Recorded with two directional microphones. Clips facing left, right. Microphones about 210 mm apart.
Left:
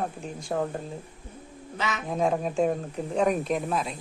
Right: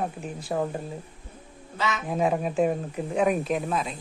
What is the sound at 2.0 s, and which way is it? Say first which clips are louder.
Speech: even; 5° right (ahead or behind).